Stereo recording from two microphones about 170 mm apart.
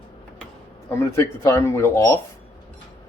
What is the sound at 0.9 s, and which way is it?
Speech, 15° left (ahead or behind).